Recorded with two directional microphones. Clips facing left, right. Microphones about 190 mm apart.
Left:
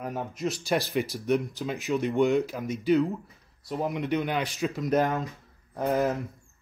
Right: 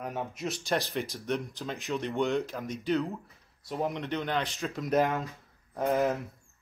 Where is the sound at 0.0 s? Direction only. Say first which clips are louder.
Left 3 dB; centre (ahead or behind).